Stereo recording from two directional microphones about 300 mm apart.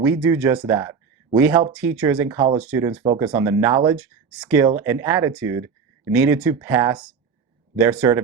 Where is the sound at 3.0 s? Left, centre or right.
Right.